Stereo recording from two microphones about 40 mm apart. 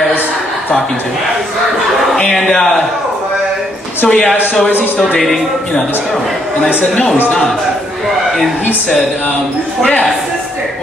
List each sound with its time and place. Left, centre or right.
2.1 s speech: centre
4.1 s a man's voice: left
5.2 s speech: centre